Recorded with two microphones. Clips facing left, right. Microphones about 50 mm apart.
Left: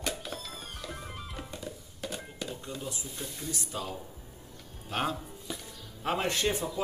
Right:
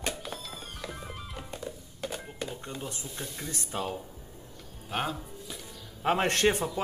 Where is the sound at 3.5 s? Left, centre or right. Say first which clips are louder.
Right 5 dB; right.